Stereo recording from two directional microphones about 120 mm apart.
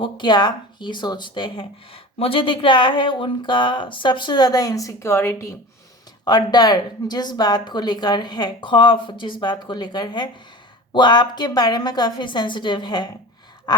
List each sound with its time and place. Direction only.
0.0 s speech: 40° left (ahead or behind); by 5.5 s 20° left (ahead or behind)
6.2 s speech: 35° left (ahead or behind)
13.7 s a sound: 35° left (ahead or behind)